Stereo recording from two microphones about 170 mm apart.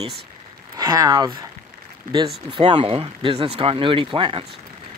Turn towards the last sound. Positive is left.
turn(degrees=-30)  # may be behind; listen again after turning